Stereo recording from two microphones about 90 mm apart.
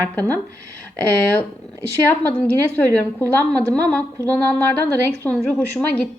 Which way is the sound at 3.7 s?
15° left (ahead or behind).